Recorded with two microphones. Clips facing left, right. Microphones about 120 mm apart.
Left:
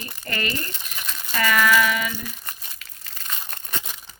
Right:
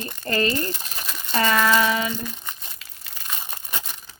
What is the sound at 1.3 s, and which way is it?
Crumpling, 30° right (ahead or behind).